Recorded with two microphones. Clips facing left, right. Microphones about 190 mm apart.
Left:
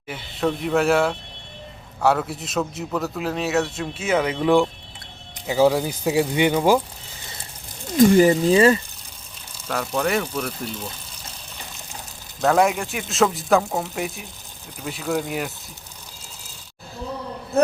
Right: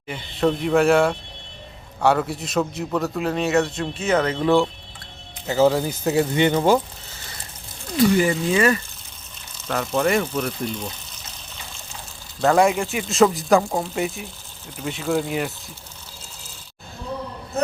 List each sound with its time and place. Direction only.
0.1 s a man's voice: centre (ahead or behind)
7.9 s speech: 45° left (ahead or behind)
9.6 s a man's voice: 5° left (ahead or behind)
12.4 s a man's voice: centre (ahead or behind)